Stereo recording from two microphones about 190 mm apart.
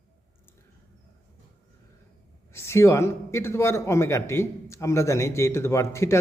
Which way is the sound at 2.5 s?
15° left (ahead or behind).